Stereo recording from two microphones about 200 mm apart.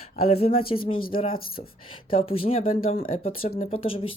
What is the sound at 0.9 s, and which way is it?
Speech, 45° left (ahead or behind).